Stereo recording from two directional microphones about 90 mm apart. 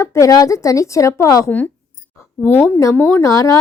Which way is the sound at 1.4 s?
20° left (ahead or behind).